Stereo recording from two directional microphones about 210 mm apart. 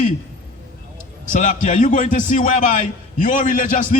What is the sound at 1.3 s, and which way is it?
A man's voice, 35° left (ahead or behind).